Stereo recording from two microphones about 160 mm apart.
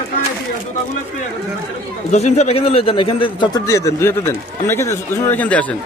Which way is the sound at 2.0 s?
45° left (ahead or behind).